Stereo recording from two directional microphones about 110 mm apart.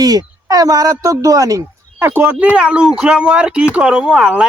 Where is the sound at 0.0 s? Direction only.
35° right (ahead or behind).